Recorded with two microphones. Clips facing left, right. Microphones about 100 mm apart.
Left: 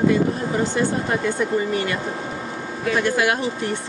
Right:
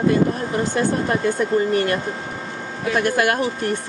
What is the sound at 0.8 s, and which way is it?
Speech, 50° right (ahead or behind).